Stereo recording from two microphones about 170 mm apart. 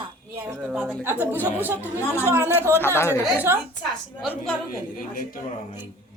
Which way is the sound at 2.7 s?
15° left (ahead or behind).